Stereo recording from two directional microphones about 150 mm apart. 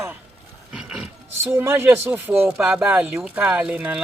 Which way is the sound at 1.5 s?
15° right (ahead or behind).